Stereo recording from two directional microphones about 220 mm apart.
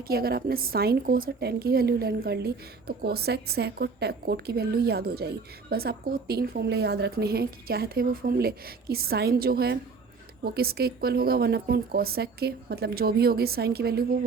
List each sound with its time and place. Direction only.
0.1 s a woman's voice: 45° right (ahead or behind)